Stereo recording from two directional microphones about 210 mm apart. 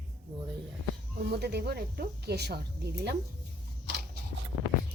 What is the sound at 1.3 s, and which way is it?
Speech, 50° right (ahead or behind).